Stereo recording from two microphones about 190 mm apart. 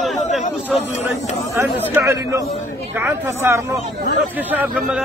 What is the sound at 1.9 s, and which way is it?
A man's voice, 15° right (ahead or behind).